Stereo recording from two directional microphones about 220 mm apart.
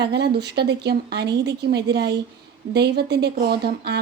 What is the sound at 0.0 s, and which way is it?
Speech, 50° right (ahead or behind).